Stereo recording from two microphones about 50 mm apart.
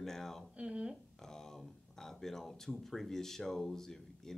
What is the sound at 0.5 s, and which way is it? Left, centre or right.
Speech, right.